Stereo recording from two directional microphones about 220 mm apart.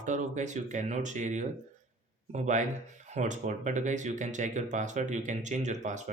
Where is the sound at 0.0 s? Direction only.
35° right (ahead or behind).